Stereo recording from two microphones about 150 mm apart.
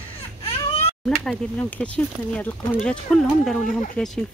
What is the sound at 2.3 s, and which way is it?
Speech, 10° left (ahead or behind).